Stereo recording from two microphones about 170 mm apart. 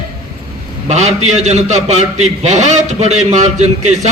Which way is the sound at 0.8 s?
45° right (ahead or behind).